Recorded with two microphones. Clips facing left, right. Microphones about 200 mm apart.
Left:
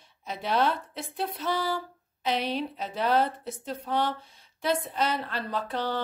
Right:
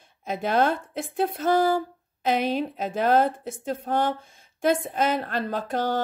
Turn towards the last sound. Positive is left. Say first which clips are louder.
# right 4 dB
turn(degrees=-45)  # may be behind; listen again after turning